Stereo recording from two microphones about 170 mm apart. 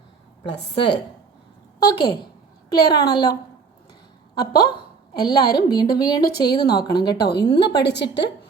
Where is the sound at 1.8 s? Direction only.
25° left (ahead or behind).